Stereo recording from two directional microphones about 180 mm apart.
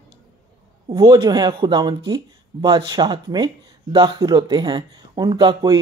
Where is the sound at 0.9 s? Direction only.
20° right (ahead or behind).